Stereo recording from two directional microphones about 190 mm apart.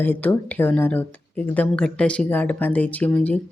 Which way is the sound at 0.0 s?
10° left (ahead or behind).